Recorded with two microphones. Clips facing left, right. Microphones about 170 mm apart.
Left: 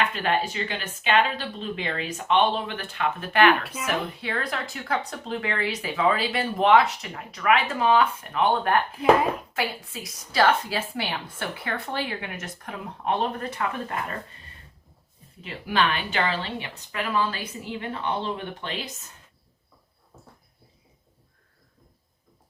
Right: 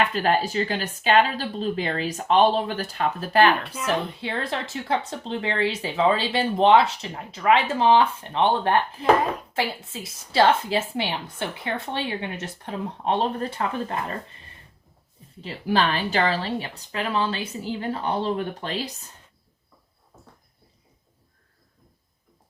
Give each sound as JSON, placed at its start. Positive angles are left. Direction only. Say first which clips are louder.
{"t": 0.0, "sound": "speech", "louder": "right 3 dB", "side_deg": -40}
{"t": 15.4, "sound": "speech", "louder": "right 2 dB", "side_deg": -35}